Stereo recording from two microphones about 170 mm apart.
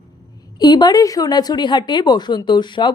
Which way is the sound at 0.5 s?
25° left (ahead or behind).